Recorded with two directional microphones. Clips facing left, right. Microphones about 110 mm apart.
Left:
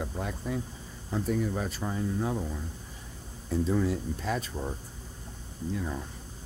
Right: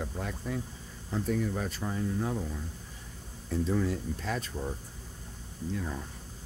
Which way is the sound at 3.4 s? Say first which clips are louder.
Left 2 dB; 15° left (ahead or behind).